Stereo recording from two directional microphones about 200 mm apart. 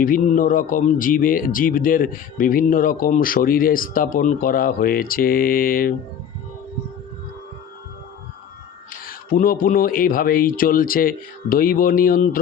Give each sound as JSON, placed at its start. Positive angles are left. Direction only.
{"t": 0.0, "sound": "speech", "side_deg": 45}
{"t": 8.9, "sound": "speech", "side_deg": 45}